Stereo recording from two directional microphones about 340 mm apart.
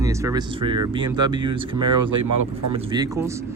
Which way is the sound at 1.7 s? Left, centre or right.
Right.